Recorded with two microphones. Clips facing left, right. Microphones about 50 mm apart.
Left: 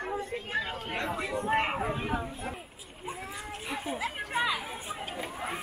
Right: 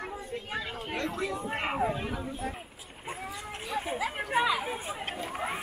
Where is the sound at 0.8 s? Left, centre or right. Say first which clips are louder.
Even; left.